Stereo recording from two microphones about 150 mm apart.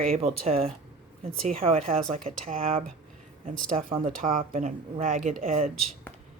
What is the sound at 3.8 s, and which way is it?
Speech, 35° right (ahead or behind).